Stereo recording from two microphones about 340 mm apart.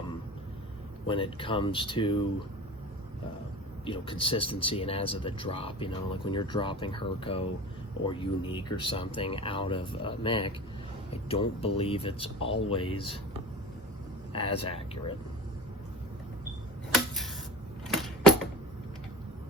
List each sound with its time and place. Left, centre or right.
1.0 s speech: centre
3.8 s speech: centre
14.3 s speech: centre
17.8 s a sound: centre